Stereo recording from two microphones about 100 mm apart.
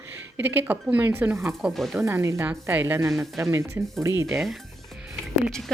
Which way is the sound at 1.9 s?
25° right (ahead or behind).